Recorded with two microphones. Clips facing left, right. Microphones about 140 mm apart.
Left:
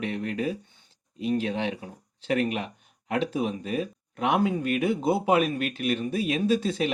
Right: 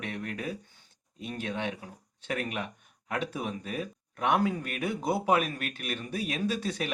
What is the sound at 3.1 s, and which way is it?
Speech, 25° left (ahead or behind).